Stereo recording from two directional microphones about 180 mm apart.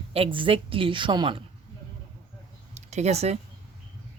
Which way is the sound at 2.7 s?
40° right (ahead or behind).